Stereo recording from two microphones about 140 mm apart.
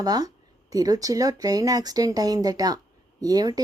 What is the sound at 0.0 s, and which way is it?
A woman's voice, 25° right (ahead or behind).